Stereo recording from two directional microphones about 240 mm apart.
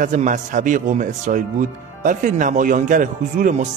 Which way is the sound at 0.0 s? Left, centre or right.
Right.